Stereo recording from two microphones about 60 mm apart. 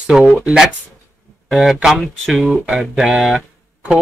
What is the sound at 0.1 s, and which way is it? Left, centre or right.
Speech, centre.